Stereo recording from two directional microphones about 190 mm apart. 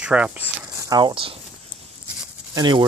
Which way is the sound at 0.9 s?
25° right (ahead or behind).